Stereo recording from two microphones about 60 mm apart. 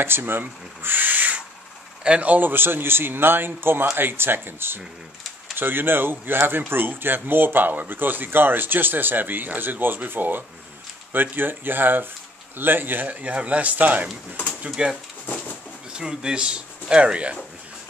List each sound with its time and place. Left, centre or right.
0.0 s speech: right
14.7 s speech: centre